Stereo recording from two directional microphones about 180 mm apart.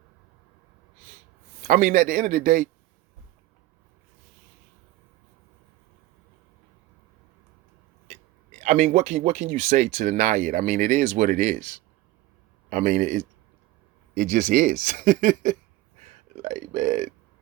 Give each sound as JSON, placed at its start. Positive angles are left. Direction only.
{"t": 1.6, "sound": "speech", "side_deg": -45}
{"t": 8.6, "sound": "speech", "side_deg": -45}